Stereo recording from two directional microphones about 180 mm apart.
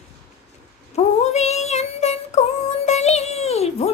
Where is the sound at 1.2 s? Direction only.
40° left (ahead or behind).